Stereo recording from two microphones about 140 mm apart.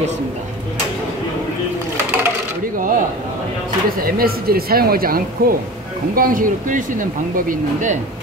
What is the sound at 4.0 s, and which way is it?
Speech, 90° right.